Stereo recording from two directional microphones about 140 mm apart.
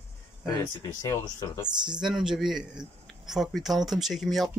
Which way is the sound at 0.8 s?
25° left (ahead or behind).